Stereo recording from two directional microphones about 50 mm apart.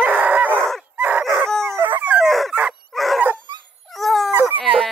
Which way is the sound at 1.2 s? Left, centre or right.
Centre.